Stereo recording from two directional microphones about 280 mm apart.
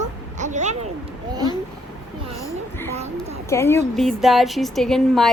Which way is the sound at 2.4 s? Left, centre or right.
Centre.